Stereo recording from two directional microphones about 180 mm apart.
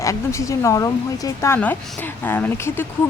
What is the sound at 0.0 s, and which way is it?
Speech, 15° left (ahead or behind).